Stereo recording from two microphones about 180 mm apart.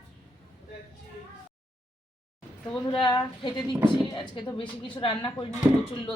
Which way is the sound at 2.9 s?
25° left (ahead or behind).